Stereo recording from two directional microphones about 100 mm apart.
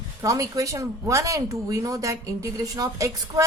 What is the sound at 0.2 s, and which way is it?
A woman's voice, 35° right (ahead or behind).